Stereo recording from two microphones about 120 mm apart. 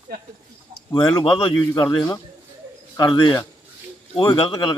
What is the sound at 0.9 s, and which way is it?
Speech, 40° left (ahead or behind).